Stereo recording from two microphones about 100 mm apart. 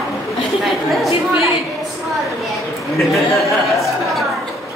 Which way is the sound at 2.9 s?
Centre (ahead or behind).